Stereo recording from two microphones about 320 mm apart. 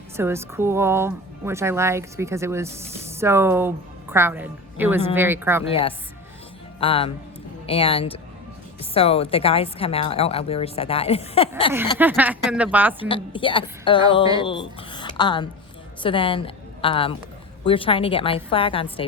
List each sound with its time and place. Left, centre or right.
0.2 s speech: centre
6.7 s a woman's voice: centre
11.9 s speech: centre
13.1 s a woman's voice: centre